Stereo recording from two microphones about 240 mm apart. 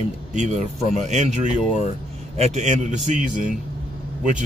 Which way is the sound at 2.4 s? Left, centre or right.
Right.